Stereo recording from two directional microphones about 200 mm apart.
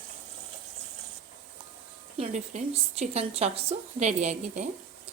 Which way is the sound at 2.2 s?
35° right (ahead or behind).